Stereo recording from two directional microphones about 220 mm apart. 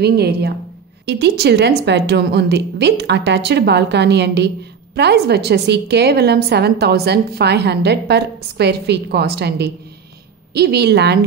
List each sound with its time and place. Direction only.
0.0 s a woman's voice: 50° right (ahead or behind)